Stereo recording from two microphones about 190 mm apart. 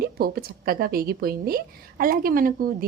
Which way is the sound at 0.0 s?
55° right (ahead or behind).